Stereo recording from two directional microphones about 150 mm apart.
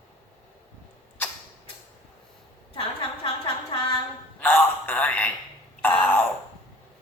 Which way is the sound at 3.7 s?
35° left (ahead or behind).